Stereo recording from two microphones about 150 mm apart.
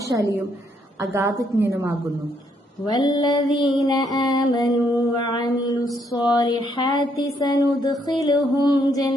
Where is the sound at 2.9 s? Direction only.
25° left (ahead or behind).